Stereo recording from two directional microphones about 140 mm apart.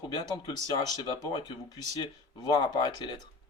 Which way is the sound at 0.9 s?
25° left (ahead or behind).